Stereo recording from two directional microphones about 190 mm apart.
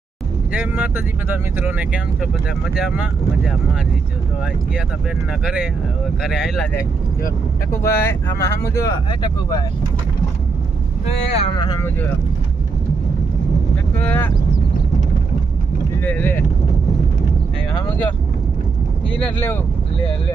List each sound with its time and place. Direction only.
0.5 s speech: 5° right (ahead or behind)
4.7 s speech: centre (ahead or behind)
7.7 s speech: 15° left (ahead or behind)
11.0 s speech: 30° left (ahead or behind)
13.9 s speech: 5° left (ahead or behind)
16.0 s speech: 10° left (ahead or behind)
19.2 s speech: 10° left (ahead or behind)